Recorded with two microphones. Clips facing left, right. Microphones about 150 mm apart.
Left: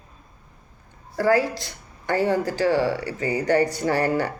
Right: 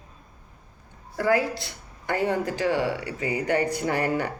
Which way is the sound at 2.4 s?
35° left (ahead or behind).